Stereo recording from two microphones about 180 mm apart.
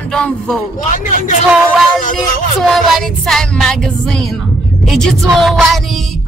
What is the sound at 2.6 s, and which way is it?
Music, centre (ahead or behind).